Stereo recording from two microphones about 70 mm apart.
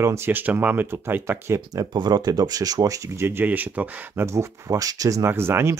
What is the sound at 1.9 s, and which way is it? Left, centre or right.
Speech, right.